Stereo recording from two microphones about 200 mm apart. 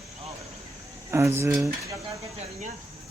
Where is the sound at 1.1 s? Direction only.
15° right (ahead or behind).